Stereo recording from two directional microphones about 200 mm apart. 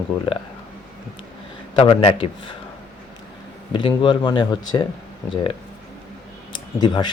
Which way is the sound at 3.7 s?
25° left (ahead or behind).